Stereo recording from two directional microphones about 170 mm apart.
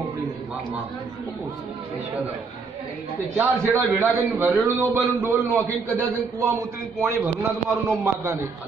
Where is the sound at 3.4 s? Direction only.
10° right (ahead or behind).